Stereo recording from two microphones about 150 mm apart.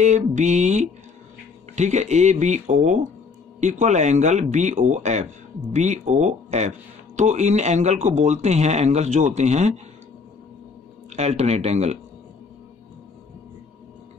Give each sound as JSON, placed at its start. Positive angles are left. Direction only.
{"t": 0.0, "sound": "speech", "side_deg": -55}
{"t": 11.1, "sound": "speech", "side_deg": -50}